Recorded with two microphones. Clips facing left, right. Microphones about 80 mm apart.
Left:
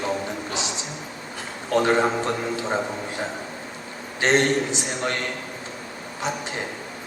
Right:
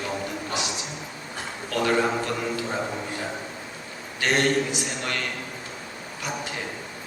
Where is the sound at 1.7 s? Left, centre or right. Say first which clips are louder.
Left 4 dB; left.